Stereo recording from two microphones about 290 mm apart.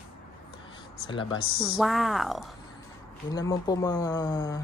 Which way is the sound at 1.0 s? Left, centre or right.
Centre.